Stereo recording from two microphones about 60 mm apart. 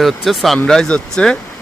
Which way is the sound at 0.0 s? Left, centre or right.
Centre.